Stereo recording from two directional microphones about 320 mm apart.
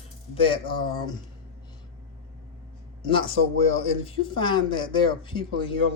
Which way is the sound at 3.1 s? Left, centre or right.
Centre.